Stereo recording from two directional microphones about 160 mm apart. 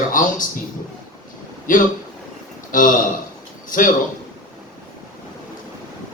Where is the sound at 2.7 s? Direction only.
55° left (ahead or behind).